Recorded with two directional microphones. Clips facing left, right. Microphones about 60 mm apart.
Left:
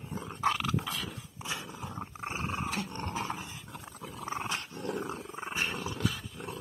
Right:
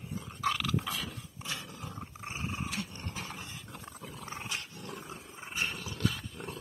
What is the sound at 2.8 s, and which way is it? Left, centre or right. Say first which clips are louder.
Dog: left 6 dB; left.